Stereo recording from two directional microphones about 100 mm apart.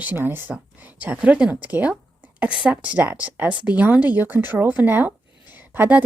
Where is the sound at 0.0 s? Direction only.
20° right (ahead or behind).